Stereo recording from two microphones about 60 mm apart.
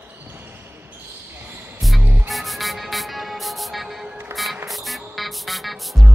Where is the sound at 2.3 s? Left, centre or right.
Centre.